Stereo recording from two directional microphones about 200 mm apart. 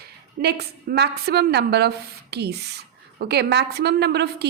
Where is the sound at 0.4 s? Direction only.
55° right (ahead or behind).